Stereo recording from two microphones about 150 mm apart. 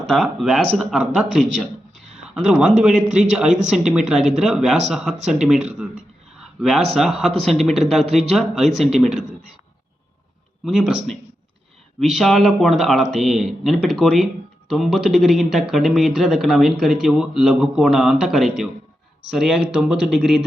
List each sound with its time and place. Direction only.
0.1 s speech: centre (ahead or behind)
10.7 s speech: 5° right (ahead or behind)